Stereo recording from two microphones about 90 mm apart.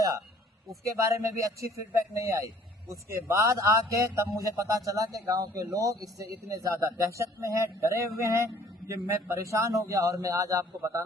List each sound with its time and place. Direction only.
0.9 s a man's voice: 35° right (ahead or behind)